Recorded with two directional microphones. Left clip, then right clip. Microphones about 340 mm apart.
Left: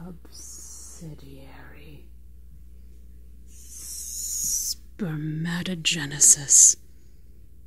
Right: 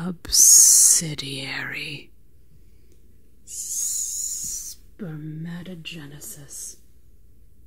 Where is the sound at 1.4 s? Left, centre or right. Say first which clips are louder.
Right 19 dB; right.